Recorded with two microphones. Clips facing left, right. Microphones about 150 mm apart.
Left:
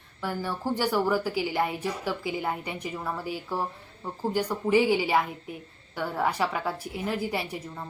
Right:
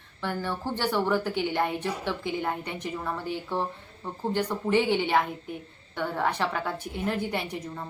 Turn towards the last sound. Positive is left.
turn(degrees=5)  # may be behind; listen again after turning